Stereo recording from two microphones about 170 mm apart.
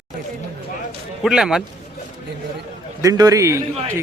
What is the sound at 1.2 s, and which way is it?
Speech, 5° right (ahead or behind).